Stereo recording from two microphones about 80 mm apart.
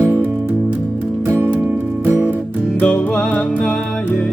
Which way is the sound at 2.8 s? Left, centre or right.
Centre.